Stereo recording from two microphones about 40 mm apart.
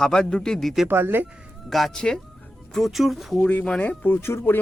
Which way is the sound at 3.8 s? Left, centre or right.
Left.